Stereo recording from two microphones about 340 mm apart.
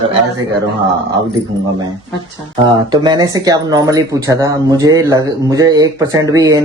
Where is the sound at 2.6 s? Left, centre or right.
Centre.